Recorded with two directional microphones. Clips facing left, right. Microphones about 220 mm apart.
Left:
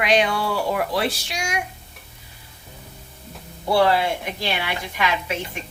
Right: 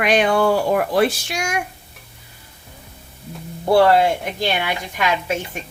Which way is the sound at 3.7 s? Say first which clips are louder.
Right 5 dB; 45° right (ahead or behind).